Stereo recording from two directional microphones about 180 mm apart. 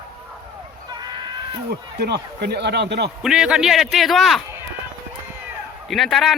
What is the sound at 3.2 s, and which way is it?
A man's voice, 5° right (ahead or behind).